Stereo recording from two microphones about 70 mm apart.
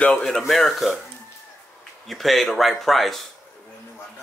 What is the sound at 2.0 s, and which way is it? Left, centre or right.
Speech, centre.